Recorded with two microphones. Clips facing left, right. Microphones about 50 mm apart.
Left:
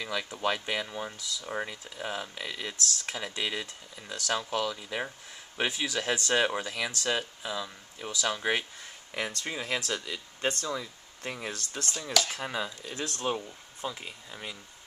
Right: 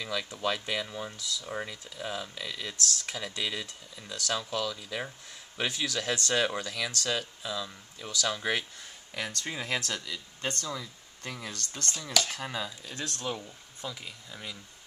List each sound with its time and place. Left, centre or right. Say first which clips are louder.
0.0 s speech: left 1 dB; centre
9.5 s speech: right 1 dB; centre
10.0 s speech: left 4 dB; left
11.7 s speech: left 1 dB; centre
12.1 s speech: left 1 dB; centre
12.4 s speech: left 2 dB; centre
13.8 s speech: left 3 dB; left